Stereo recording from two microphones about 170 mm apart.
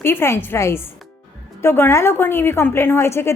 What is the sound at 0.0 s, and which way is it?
A woman's voice, 15° left (ahead or behind).